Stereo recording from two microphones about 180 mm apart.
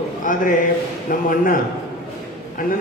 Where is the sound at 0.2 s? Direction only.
50° left (ahead or behind).